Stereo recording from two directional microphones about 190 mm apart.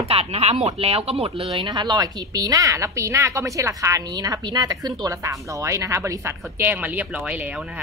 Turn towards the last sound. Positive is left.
turn(degrees=-5)  # may be behind; listen again after turning